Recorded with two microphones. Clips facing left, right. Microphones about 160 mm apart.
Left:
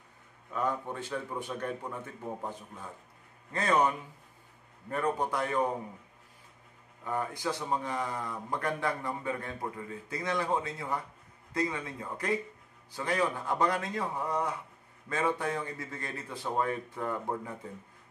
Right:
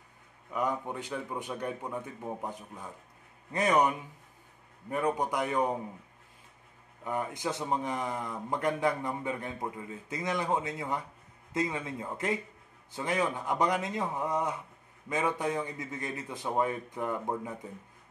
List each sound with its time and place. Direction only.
0.5 s a man's voice: 15° right (ahead or behind)
7.1 s a man's voice: 20° right (ahead or behind)